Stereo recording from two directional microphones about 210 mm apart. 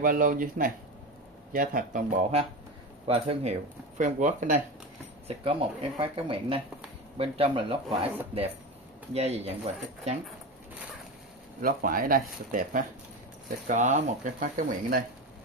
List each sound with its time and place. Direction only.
0.0 s speech: 40° right (ahead or behind); by 8.1 s 25° right (ahead or behind)
9.1 s speech: 30° right (ahead or behind)
11.6 s speech: 40° right (ahead or behind)